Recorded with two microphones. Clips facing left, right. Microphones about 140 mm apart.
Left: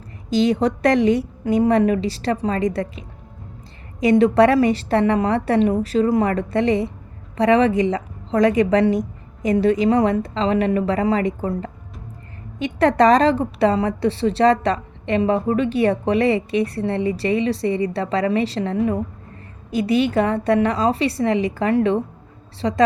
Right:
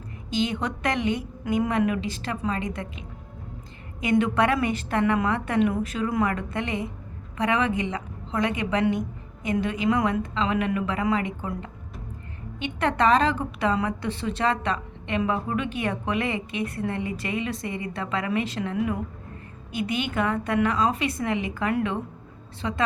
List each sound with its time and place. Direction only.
0.3 s a woman's voice: 40° left (ahead or behind)
4.0 s a woman's voice: 35° left (ahead or behind)